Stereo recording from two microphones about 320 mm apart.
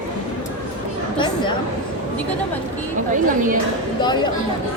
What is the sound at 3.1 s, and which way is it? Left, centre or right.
Speech, right.